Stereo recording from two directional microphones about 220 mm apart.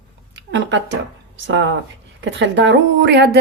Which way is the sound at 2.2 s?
55° right (ahead or behind).